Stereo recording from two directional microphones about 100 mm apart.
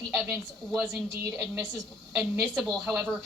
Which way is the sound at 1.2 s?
30° right (ahead or behind).